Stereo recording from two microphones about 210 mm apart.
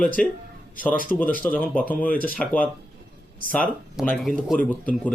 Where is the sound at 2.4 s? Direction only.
5° left (ahead or behind).